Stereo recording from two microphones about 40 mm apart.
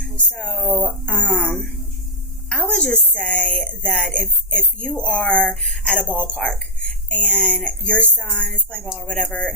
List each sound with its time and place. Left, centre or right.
0.0 s speech: left
0.5 s speech: centre
1.0 s a woman's voice: left
2.5 s music: left
2.9 s a woman's voice: left
6.7 s a sound: left
7.5 s a woman's voice: left